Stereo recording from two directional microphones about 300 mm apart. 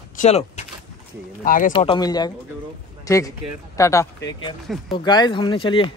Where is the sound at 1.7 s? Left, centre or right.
Centre.